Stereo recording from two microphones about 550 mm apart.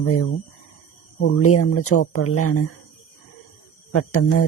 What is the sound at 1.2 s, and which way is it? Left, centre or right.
Speech, left.